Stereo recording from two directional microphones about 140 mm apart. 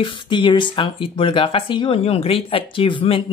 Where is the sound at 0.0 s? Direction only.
35° left (ahead or behind).